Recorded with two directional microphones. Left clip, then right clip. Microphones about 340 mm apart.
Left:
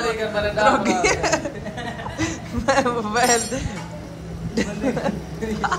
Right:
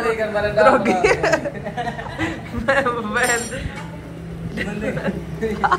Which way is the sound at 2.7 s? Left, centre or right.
Centre.